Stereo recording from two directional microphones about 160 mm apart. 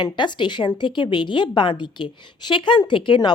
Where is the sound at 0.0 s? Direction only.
30° left (ahead or behind).